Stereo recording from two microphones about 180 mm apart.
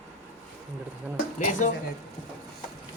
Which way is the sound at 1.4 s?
45° left (ahead or behind).